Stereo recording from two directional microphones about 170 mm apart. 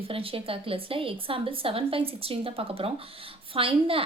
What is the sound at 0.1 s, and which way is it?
A woman's voice, 35° right (ahead or behind).